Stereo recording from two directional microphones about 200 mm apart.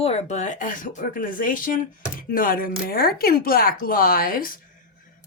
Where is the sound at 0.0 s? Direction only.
30° left (ahead or behind).